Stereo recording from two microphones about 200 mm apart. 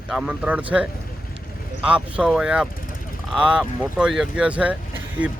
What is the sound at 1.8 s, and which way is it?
Speech, 5° right (ahead or behind).